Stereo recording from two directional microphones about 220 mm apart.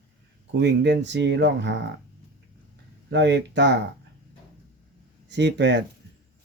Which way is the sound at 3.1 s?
50° right (ahead or behind).